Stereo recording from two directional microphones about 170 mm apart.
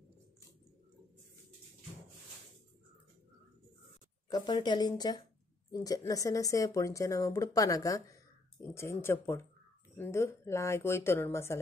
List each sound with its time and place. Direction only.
4.3 s speech: 25° left (ahead or behind)